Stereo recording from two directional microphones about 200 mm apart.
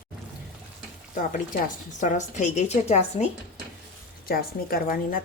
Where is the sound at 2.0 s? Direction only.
40° left (ahead or behind).